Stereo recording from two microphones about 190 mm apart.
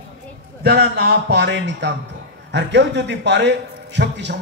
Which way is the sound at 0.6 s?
60° right (ahead or behind).